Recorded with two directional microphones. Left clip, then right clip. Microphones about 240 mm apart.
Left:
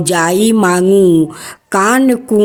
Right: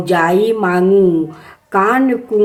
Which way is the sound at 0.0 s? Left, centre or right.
Left.